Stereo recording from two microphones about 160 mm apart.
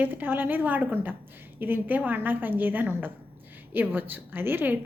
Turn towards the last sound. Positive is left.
turn(degrees=-10)  # may be behind; listen again after turning